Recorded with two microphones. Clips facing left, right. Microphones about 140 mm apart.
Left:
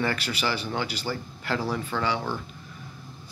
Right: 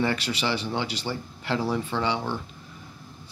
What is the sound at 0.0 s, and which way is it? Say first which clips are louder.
Speech: right 2 dB; 30° right (ahead or behind).